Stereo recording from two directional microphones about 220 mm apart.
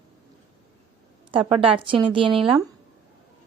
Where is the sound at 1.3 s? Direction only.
25° right (ahead or behind).